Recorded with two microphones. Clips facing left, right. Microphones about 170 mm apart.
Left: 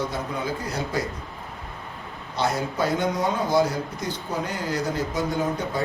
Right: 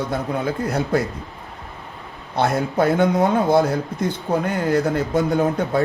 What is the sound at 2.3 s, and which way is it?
A man's voice, 55° right (ahead or behind).